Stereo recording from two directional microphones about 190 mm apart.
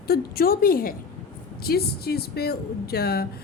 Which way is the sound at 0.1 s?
50° left (ahead or behind).